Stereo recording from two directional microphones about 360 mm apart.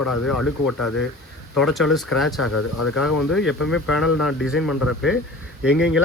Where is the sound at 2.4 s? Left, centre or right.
Left.